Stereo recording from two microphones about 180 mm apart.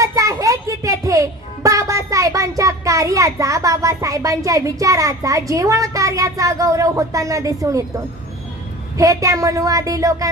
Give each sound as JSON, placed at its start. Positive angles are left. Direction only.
{"t": 0.0, "sound": "a child's voice", "side_deg": -20}
{"t": 8.9, "sound": "a woman's voice", "side_deg": -20}